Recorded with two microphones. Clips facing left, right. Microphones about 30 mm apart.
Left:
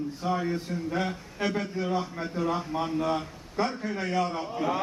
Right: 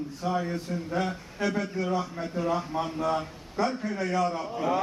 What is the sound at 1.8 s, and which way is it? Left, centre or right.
A man's voice, centre.